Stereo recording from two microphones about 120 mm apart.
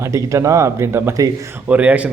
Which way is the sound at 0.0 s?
25° right (ahead or behind).